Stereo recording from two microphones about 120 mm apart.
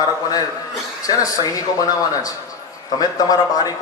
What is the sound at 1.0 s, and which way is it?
A man's voice, 30° left (ahead or behind).